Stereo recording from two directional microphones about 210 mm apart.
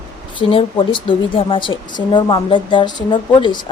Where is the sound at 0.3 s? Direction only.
25° left (ahead or behind).